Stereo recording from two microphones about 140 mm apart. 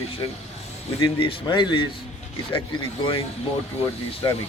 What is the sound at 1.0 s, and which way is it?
Speech, 35° left (ahead or behind).